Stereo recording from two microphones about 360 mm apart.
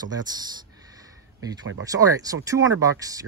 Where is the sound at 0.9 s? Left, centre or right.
Centre.